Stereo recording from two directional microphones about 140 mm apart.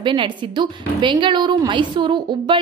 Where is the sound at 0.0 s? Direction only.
35° right (ahead or behind).